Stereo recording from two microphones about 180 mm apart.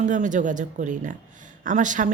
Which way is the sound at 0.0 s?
45° right (ahead or behind).